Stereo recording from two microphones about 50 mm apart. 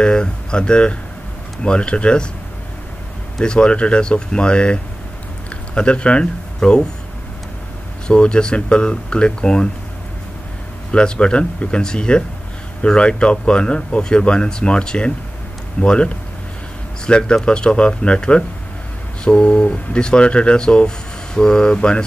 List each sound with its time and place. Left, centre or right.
0.0 s speech: centre
3.3 s speech: centre
5.8 s speech: left
8.1 s speech: centre
10.9 s speech: centre